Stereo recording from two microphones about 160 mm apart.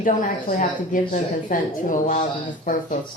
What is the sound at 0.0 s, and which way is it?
A woman's voice, 55° left (ahead or behind).